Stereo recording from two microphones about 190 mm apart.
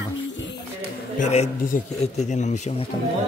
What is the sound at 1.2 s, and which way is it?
A woman's voice, 35° left (ahead or behind).